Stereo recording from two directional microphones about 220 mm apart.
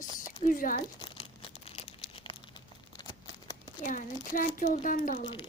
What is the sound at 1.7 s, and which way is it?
Crumpling, 25° left (ahead or behind).